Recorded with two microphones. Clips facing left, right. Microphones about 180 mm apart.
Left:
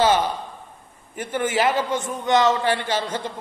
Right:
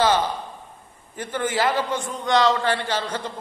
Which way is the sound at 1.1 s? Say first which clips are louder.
Left 2 dB; 15° left (ahead or behind).